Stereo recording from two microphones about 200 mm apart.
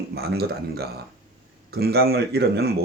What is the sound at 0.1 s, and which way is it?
A man's voice, 50° right (ahead or behind).